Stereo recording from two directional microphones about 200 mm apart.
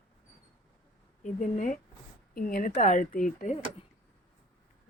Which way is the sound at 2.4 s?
45° left (ahead or behind).